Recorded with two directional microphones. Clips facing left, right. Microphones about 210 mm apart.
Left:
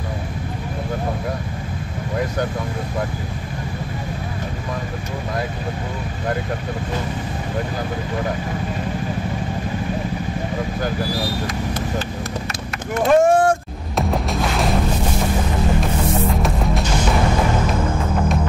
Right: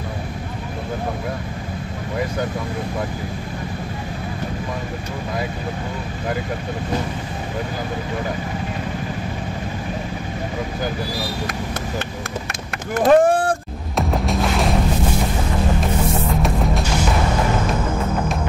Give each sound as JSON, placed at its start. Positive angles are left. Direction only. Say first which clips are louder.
{"t": 13.0, "sound": "vehicle", "louder": "even", "side_deg": -35}
{"t": 13.9, "sound": "music", "louder": "even", "side_deg": 0}